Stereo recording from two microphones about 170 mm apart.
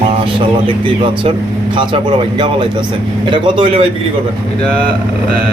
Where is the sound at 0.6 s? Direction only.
30° right (ahead or behind).